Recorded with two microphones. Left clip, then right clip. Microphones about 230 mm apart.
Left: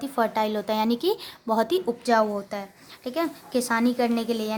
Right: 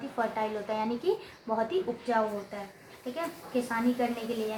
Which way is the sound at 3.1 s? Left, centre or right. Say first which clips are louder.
Left 6 dB; left.